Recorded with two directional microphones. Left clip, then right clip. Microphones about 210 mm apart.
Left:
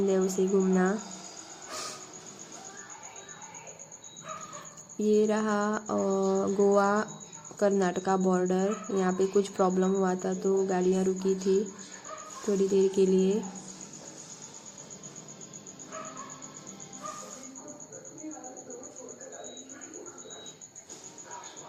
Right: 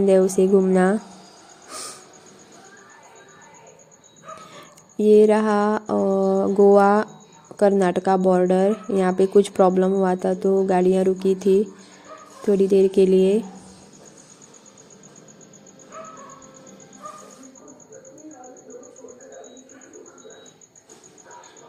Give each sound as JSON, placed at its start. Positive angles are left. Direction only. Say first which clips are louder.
{"t": 0.1, "sound": "speech", "louder": "right 11 dB", "side_deg": -30}
{"t": 1.7, "sound": "a sound", "louder": "right 3 dB", "side_deg": -15}
{"t": 4.9, "sound": "speech", "louder": "right 11 dB", "side_deg": -30}